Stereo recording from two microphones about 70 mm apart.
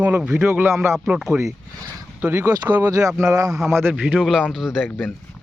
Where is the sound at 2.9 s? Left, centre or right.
Right.